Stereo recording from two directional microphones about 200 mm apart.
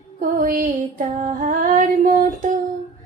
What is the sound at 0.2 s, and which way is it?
Female singing, 45° right (ahead or behind).